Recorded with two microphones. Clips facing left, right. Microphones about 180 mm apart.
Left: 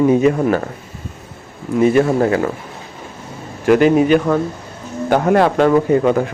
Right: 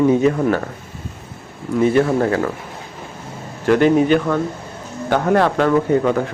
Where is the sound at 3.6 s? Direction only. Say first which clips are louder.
Left 2 dB; 15° left (ahead or behind).